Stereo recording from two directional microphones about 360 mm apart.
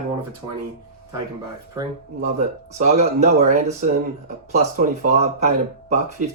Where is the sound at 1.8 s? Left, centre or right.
Centre.